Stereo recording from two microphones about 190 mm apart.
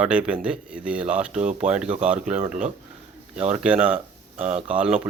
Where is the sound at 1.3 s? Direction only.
40° right (ahead or behind).